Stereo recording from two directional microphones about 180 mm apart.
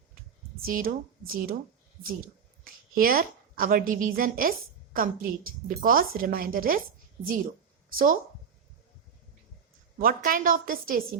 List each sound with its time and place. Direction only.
0.6 s a woman's voice: 50° right (ahead or behind)
2.9 s a woman's voice: 55° right (ahead or behind)
7.9 s a woman's voice: 50° right (ahead or behind)
10.0 s a woman's voice: 50° right (ahead or behind)